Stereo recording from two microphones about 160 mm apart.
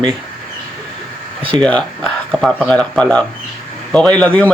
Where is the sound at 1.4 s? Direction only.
30° right (ahead or behind).